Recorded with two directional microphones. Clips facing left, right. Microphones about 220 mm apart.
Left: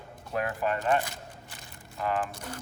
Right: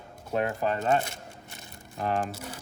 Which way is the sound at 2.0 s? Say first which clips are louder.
Right 1 dB; 45° right (ahead or behind).